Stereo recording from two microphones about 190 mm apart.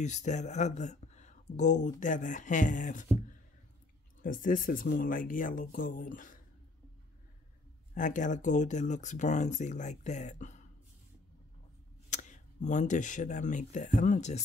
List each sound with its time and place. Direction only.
0.0 s speech: 40° left (ahead or behind)
4.2 s speech: 45° left (ahead or behind)
7.9 s speech: 40° left (ahead or behind)
12.1 s speech: 40° left (ahead or behind)